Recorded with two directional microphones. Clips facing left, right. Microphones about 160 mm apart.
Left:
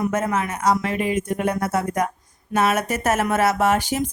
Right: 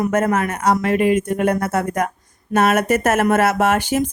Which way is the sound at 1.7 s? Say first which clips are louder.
Right 2 dB; 50° right (ahead or behind).